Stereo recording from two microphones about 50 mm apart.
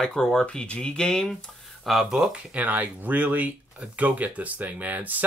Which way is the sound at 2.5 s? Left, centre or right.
Right.